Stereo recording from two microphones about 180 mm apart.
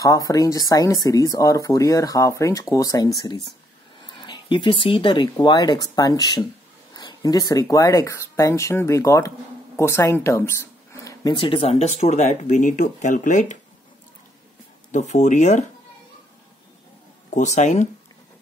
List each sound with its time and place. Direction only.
0.0 s speech: 20° left (ahead or behind)
11.1 s speech: 25° left (ahead or behind); by 13.6 s 45° left (ahead or behind)
14.9 s speech: 40° left (ahead or behind)
17.3 s speech: 40° left (ahead or behind)